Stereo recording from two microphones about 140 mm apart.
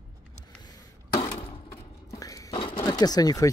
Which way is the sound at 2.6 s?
35° left (ahead or behind).